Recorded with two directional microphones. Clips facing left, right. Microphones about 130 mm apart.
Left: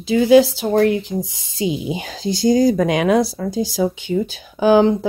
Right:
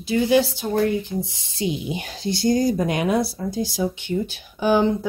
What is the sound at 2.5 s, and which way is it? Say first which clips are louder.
Speech: left 5 dB; 90° left.